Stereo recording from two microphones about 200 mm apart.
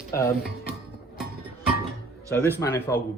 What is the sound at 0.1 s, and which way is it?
Speech, 15° left (ahead or behind).